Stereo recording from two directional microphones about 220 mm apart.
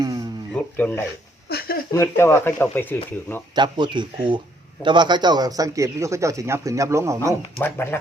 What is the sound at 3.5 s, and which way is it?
A man's voice, 20° right (ahead or behind).